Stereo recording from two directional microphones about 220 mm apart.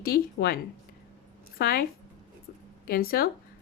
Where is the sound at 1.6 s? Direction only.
45° left (ahead or behind).